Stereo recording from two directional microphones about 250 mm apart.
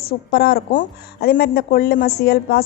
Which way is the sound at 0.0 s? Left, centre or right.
Left.